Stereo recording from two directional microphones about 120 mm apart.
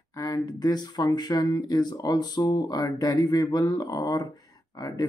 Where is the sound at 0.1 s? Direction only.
30° left (ahead or behind).